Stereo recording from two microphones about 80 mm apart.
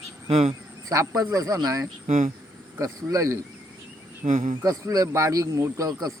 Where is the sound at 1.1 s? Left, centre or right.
Right.